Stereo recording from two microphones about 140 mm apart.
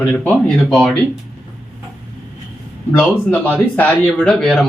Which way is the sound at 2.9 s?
15° left (ahead or behind).